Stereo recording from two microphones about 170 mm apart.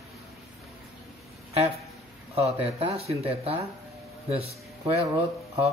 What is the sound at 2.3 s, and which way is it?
Speech, 35° right (ahead or behind).